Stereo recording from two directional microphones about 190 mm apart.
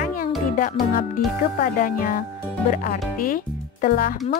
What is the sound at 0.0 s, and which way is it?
Music, 45° left (ahead or behind).